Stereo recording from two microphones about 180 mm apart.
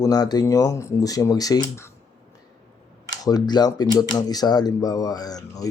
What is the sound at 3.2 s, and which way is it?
Speech, 20° left (ahead or behind).